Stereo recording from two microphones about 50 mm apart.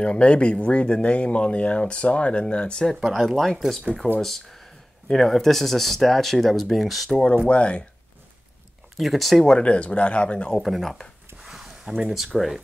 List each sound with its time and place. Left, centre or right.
0.0 s speech: left
2.8 s speech: centre
7.4 s speech: left
8.9 s speech: centre
9.5 s speech: left
10.5 s speech: centre
11.4 s a sound: centre